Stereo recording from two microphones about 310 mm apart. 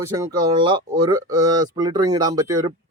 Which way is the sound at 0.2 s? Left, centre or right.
Centre.